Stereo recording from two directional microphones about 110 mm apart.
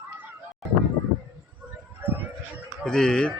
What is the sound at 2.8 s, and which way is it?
Speech, 5° left (ahead or behind).